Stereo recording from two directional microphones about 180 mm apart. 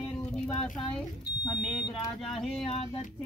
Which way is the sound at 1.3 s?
65° left (ahead or behind).